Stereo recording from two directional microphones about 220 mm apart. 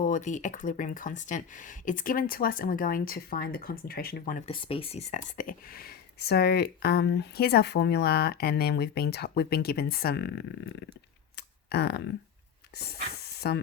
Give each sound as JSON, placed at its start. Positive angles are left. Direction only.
{"t": 0.0, "sound": "speech", "side_deg": 35}
{"t": 4.5, "sound": "speech", "side_deg": 25}
{"t": 11.3, "sound": "a sound", "side_deg": 45}
{"t": 12.7, "sound": "speech", "side_deg": 45}